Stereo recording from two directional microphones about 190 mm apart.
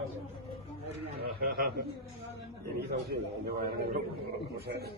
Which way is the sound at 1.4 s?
50° right (ahead or behind).